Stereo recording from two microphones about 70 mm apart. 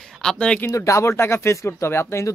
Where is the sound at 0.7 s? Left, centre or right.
Left.